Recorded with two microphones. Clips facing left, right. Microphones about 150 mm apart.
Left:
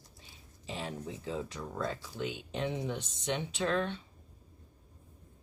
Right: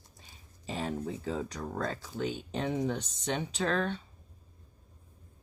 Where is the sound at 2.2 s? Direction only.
40° right (ahead or behind).